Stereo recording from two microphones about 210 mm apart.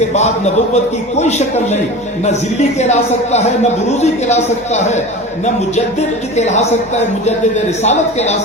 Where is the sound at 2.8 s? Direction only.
35° left (ahead or behind).